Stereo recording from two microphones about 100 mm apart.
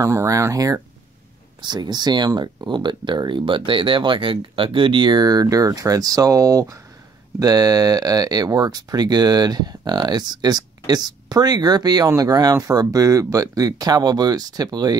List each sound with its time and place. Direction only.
0.0 s speech: 30° right (ahead or behind)
1.6 s speech: 45° right (ahead or behind)